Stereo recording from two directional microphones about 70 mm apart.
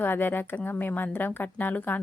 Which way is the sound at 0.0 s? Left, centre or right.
Left.